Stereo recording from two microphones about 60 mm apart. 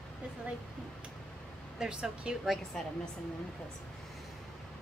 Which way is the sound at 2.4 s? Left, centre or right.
Centre.